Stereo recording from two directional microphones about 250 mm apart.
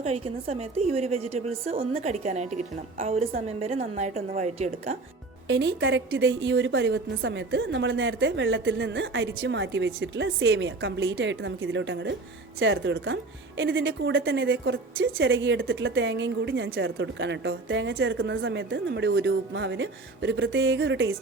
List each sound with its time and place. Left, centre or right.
0.0 s a woman's voice: right
5.5 s a woman's voice: right